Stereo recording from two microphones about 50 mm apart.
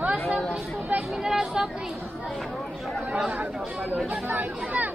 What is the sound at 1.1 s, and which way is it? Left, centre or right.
Speech, centre.